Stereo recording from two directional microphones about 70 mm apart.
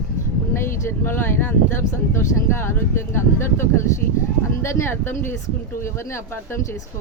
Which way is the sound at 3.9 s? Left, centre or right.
Left.